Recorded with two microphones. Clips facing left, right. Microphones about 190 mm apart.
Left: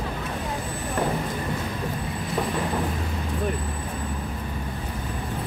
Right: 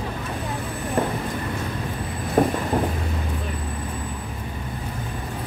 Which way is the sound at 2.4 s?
50° right (ahead or behind).